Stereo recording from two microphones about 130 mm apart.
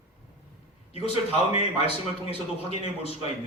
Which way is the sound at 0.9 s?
55° left (ahead or behind).